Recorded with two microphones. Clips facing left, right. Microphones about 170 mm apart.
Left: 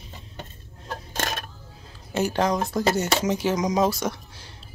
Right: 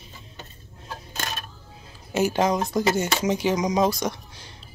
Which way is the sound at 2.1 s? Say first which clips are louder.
Right 1 dB; 5° right (ahead or behind).